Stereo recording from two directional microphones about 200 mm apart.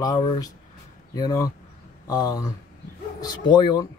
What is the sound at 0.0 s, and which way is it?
Speech, 20° left (ahead or behind).